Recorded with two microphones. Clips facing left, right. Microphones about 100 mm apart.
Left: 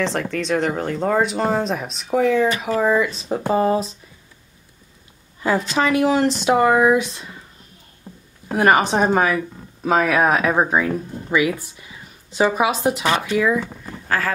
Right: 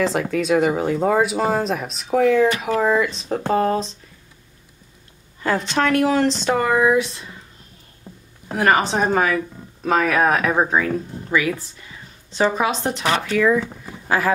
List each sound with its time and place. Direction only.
0.0 s speech: 5° right (ahead or behind)
5.4 s speech: 5° left (ahead or behind)
6.6 s speech: 20° left (ahead or behind)
8.5 s speech: 15° left (ahead or behind)
14.0 s speech: 15° right (ahead or behind)